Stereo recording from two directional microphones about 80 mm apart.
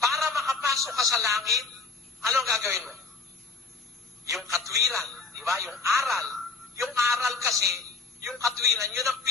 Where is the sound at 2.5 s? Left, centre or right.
Right.